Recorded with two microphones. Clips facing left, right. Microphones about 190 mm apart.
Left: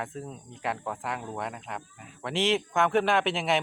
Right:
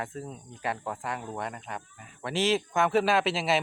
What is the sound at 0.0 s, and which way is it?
Speech, centre (ahead or behind).